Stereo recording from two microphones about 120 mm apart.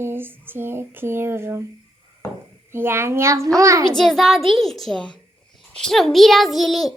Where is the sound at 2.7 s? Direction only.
20° right (ahead or behind).